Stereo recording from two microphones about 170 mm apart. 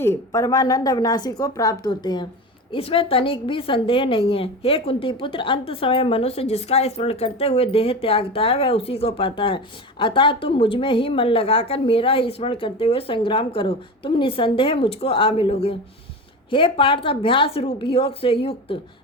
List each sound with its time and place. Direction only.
0.0 s a woman's voice: 15° left (ahead or behind); by 18.8 s 35° left (ahead or behind)